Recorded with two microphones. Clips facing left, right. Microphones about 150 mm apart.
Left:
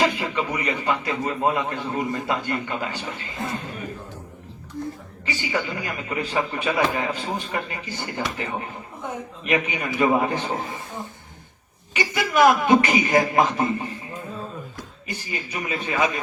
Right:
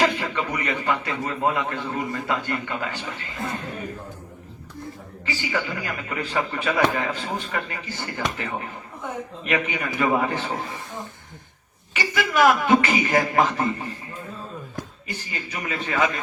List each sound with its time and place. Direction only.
0.0 s a man's voice: 15° left (ahead or behind)
5.2 s a man's voice: 20° left (ahead or behind)
11.9 s a man's voice: 20° left (ahead or behind)
15.1 s a man's voice: 15° left (ahead or behind)